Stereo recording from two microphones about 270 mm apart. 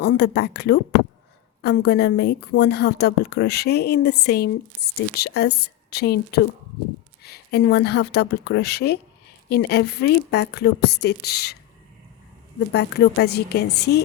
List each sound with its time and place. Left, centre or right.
0.0 s a woman's voice: left
12.5 s a woman's voice: left